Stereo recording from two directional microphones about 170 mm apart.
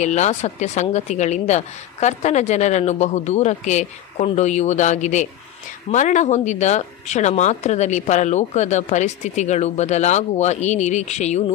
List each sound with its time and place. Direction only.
0.0 s speech: 40° left (ahead or behind)